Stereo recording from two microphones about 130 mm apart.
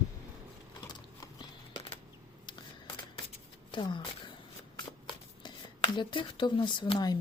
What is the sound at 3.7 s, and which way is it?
Speech, 35° left (ahead or behind).